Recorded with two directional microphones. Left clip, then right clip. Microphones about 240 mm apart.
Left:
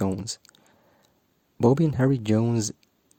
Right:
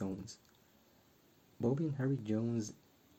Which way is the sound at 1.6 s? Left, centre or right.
Left.